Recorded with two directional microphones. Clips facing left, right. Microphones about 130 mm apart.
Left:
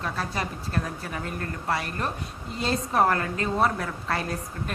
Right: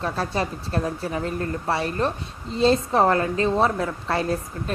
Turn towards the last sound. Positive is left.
turn(degrees=-30)  # may be behind; listen again after turning